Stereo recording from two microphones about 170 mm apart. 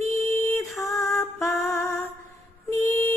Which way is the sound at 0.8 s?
Centre (ahead or behind).